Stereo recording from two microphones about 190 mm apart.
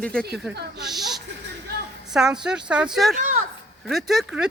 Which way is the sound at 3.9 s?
Centre (ahead or behind).